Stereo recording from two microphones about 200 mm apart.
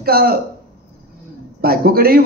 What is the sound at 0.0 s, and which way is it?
Speech, 50° right (ahead or behind).